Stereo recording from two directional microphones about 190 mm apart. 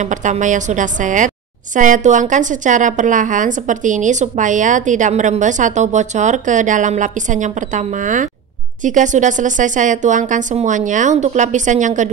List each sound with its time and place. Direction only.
0.0 s a woman's voice: 40° right (ahead or behind)